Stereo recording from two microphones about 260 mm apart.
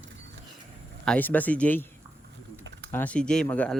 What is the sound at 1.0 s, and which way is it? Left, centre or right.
Speech, centre.